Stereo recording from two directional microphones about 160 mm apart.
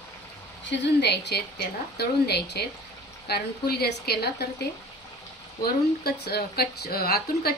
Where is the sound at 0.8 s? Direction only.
90° left.